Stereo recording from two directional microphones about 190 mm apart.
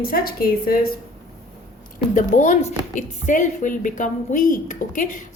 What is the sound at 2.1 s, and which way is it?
A woman's voice, 40° left (ahead or behind).